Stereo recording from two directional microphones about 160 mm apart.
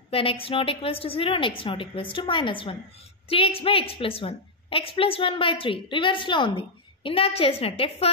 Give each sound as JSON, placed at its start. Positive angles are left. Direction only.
{"t": 0.1, "sound": "a woman's voice", "side_deg": 35}